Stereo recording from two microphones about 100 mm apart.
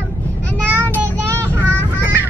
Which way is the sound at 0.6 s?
15° left (ahead or behind).